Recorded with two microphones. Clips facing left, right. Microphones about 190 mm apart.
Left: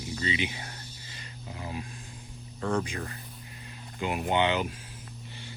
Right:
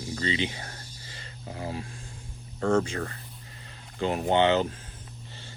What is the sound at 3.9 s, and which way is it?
Speech, 30° right (ahead or behind).